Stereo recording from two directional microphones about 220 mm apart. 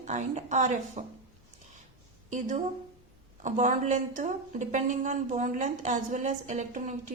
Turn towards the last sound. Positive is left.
turn(degrees=-35)  # may be behind; listen again after turning